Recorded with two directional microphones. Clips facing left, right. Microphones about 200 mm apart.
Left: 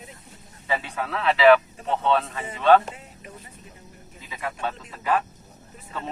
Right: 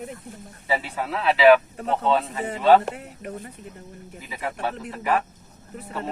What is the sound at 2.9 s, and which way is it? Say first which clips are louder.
Speech: right 8 dB; 60° right (ahead or behind).